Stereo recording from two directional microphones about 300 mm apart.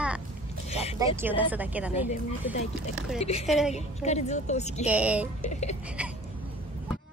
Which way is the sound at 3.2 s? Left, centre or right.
Left.